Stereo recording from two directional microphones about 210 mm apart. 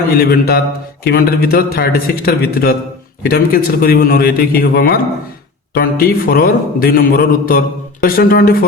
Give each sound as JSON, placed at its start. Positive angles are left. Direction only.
{"t": 0.1, "sound": "a man's voice", "side_deg": 45}